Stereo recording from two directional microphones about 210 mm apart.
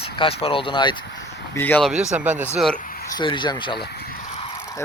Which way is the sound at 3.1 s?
20° left (ahead or behind).